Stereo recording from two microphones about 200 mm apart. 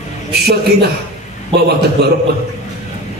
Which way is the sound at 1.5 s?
25° right (ahead or behind).